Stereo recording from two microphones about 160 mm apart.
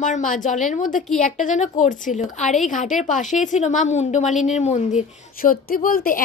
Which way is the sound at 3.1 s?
50° left (ahead or behind).